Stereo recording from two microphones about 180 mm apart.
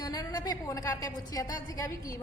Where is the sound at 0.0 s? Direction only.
20° left (ahead or behind).